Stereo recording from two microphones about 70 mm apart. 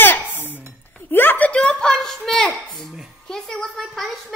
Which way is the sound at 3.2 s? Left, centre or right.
Centre.